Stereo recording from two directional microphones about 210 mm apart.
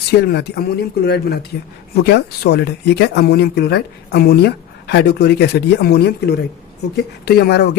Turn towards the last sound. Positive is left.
turn(degrees=50)  # may be behind; listen again after turning